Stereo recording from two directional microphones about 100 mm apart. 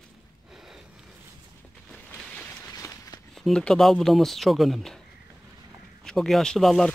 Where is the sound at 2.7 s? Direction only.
35° left (ahead or behind).